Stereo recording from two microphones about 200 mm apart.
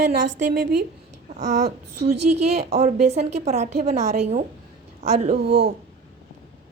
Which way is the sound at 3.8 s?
50° right (ahead or behind).